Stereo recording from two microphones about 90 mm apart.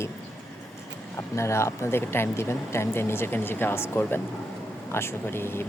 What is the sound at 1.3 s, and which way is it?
Speech, 30° left (ahead or behind).